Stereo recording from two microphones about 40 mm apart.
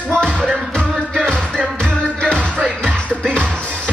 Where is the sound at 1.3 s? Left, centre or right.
Centre.